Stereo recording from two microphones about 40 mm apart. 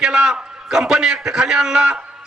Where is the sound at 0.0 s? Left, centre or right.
Centre.